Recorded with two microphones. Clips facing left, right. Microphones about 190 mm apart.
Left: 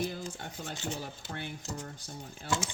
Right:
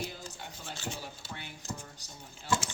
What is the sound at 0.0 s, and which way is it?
Rub, 55° left (ahead or behind).